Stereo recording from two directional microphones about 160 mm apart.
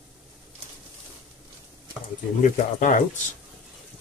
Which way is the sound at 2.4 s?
55° left (ahead or behind).